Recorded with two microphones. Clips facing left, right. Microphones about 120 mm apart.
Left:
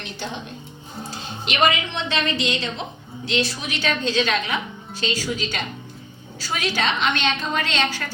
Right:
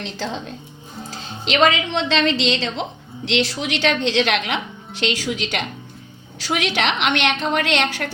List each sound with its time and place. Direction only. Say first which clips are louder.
0.0 s a woman's voice: right 4 dB; 90° right; by 8.1 s 65° right (ahead or behind)